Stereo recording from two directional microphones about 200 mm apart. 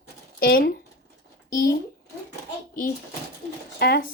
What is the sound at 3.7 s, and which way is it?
Speech, 50° left (ahead or behind).